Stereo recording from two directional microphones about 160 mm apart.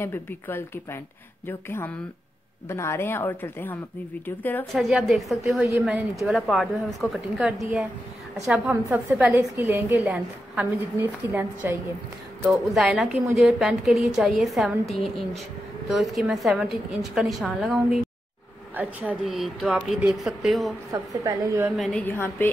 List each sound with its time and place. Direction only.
0.0 s a woman's voice: 15° left (ahead or behind)
2.7 s a woman's voice: 15° left (ahead or behind)
4.7 s a woman's voice: centre (ahead or behind)
5.6 s a woman's voice: 10° right (ahead or behind)
6.2 s a woman's voice: centre (ahead or behind)
12.4 s a woman's voice: centre (ahead or behind)
18.8 s a woman's voice: 10° right (ahead or behind)
20.9 s a woman's voice: 20° right (ahead or behind)
21.6 s a woman's voice: centre (ahead or behind)
22.0 s a woman's voice: 15° left (ahead or behind)